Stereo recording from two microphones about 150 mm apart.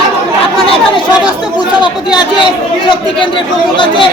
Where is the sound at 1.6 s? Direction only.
30° left (ahead or behind).